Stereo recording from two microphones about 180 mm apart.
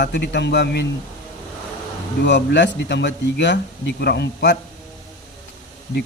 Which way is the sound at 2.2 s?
75° left (ahead or behind).